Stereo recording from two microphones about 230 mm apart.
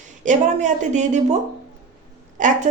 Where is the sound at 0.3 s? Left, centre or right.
Right.